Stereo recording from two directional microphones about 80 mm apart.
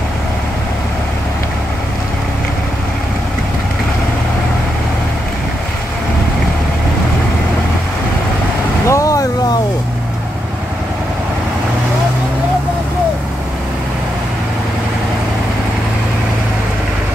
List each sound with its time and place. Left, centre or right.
8.8 s vehicle: left